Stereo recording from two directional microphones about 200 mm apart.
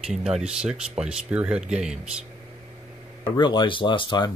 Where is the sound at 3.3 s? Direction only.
20° left (ahead or behind).